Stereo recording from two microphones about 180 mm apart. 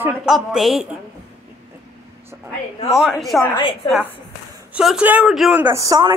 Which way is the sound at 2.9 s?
Centre (ahead or behind).